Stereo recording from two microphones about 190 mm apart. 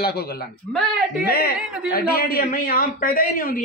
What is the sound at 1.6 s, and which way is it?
Speech, centre (ahead or behind).